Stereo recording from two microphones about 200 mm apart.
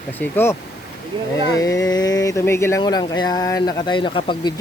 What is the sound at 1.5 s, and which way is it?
Speech, 15° left (ahead or behind).